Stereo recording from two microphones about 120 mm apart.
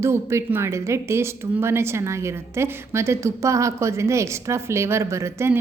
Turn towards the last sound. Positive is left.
turn(degrees=-20)  # may be behind; listen again after turning